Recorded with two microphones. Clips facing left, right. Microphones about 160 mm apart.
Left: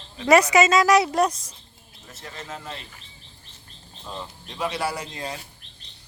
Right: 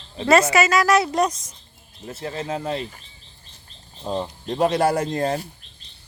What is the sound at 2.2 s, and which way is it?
Speech, 40° right (ahead or behind).